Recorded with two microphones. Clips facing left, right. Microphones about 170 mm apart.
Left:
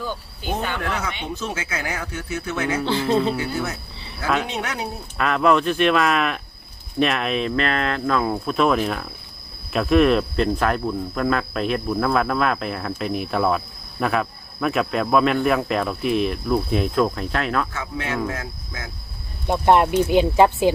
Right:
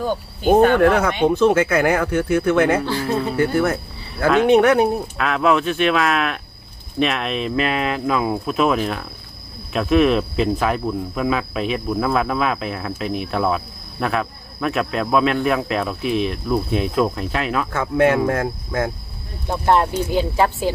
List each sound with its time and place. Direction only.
0.0 s speech: 50° right (ahead or behind)
2.8 s speech: 20° left (ahead or behind)
3.3 s speech: 55° right (ahead or behind)
5.1 s speech: centre (ahead or behind)
17.7 s speech: 55° right (ahead or behind)
19.5 s speech: 15° left (ahead or behind)